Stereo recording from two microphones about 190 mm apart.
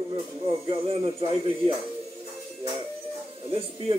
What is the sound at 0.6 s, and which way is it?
Speech, 30° right (ahead or behind).